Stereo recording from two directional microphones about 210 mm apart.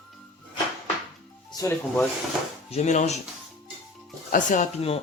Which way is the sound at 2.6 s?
30° left (ahead or behind).